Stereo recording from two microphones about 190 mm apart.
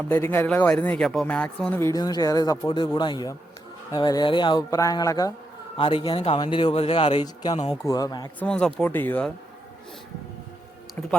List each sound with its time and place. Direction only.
0.1 s speech: 10° left (ahead or behind)
8.4 s speech: 5° left (ahead or behind)